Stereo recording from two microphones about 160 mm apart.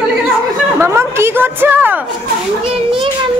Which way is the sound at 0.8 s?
15° right (ahead or behind).